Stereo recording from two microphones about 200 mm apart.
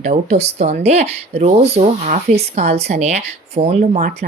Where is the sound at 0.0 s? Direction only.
35° right (ahead or behind).